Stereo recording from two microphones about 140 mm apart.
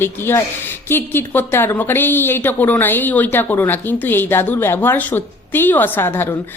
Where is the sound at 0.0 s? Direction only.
15° left (ahead or behind).